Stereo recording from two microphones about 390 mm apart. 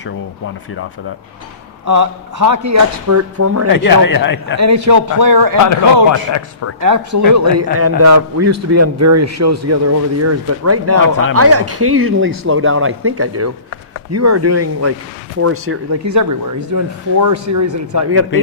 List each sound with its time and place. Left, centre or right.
1.9 s speech: right
3.7 s speech: left
4.5 s speech: right
6.1 s a man's voice: left
6.8 s a man's voice: right